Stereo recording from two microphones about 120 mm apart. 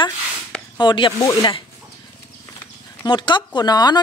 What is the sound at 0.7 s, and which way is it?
Speech, 40° left (ahead or behind).